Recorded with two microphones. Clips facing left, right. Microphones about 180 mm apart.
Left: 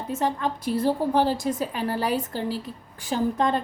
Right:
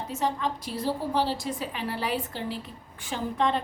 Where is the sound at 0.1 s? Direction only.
50° left (ahead or behind).